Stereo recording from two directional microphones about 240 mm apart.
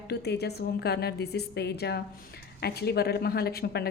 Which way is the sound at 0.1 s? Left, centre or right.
Left.